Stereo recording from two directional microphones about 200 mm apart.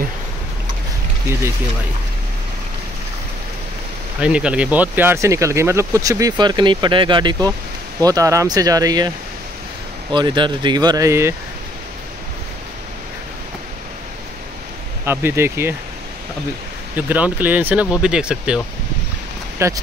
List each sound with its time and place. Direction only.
4.2 s speech: 5° right (ahead or behind)
10.1 s speech: 25° right (ahead or behind)
15.0 s speech: 10° right (ahead or behind)
16.9 s speech: 10° right (ahead or behind)
19.6 s speech: 15° right (ahead or behind)